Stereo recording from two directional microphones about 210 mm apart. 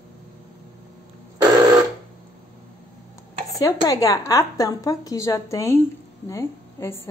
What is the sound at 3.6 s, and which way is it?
A woman's voice, 15° left (ahead or behind).